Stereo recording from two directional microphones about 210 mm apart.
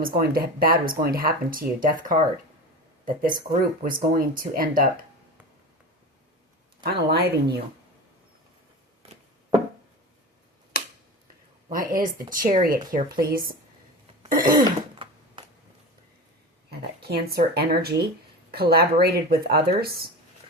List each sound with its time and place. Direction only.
0.0 s speech: 45° right (ahead or behind)
6.8 s speech: 50° right (ahead or behind)
11.7 s speech: 40° right (ahead or behind)
14.6 s throat clearing: 25° right (ahead or behind)
16.6 s speech: 50° right (ahead or behind)